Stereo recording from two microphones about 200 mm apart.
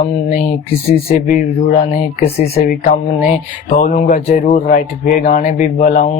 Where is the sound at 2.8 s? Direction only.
35° left (ahead or behind).